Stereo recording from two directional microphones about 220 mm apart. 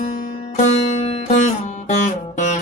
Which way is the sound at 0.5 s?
30° left (ahead or behind).